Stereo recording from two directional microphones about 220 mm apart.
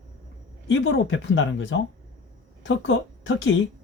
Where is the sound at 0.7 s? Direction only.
55° left (ahead or behind).